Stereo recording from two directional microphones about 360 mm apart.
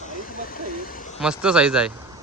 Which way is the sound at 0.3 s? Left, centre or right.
Left.